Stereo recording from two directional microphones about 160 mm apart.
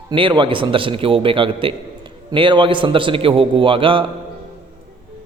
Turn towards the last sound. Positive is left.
turn(degrees=-35)  # may be behind; listen again after turning